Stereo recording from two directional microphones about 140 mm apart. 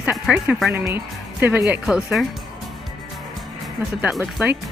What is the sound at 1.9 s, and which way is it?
Speech, centre (ahead or behind).